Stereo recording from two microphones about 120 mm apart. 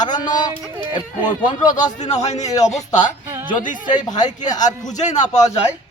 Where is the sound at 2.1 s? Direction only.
70° left (ahead or behind).